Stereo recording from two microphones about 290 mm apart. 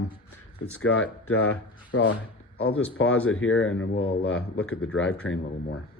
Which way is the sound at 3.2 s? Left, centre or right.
Left.